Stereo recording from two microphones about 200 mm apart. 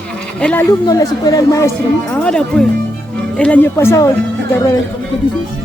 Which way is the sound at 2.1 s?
5° left (ahead or behind).